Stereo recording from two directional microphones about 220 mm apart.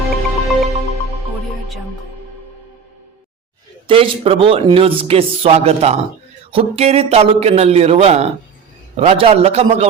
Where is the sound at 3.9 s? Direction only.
25° right (ahead or behind).